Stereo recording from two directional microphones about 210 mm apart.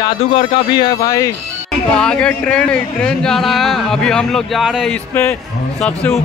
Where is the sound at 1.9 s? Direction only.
5° left (ahead or behind).